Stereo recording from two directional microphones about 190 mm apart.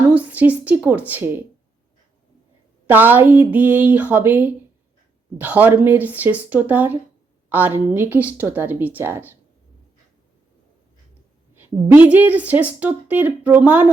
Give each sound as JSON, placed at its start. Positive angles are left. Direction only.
{"t": 0.1, "sound": "a woman's voice", "side_deg": -5}
{"t": 2.8, "sound": "a woman's voice", "side_deg": -10}
{"t": 11.6, "sound": "a woman's voice", "side_deg": -5}